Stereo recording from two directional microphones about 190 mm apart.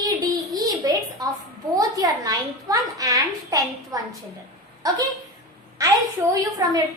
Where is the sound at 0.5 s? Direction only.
20° right (ahead or behind).